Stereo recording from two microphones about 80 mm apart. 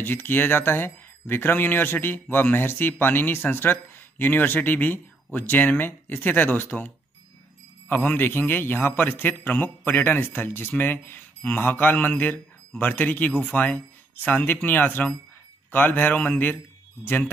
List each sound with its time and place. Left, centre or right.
0.0 s speech: left
7.9 s speech: left